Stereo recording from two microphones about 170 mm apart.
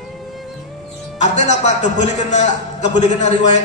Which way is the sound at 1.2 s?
45° left (ahead or behind).